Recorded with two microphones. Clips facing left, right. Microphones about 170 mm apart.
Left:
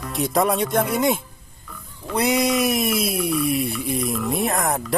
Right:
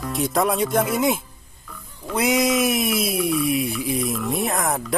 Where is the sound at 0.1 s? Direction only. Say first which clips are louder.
Left 1 dB; centre (ahead or behind).